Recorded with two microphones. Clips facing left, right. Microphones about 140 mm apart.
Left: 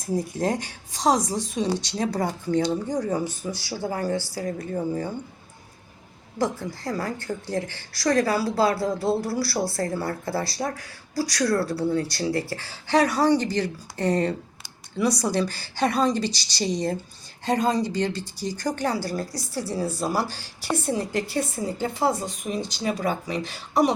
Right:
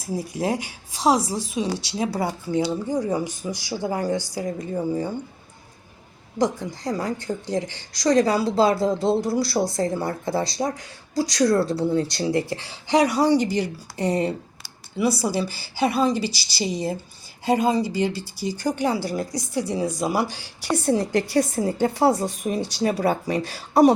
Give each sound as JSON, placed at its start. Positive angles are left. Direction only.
{"t": 0.0, "sound": "speech", "side_deg": -10}
{"t": 6.4, "sound": "a woman's voice", "side_deg": -15}
{"t": 21.6, "sound": "speech", "side_deg": -35}